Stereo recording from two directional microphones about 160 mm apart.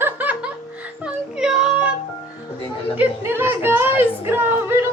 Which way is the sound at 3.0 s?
15° right (ahead or behind).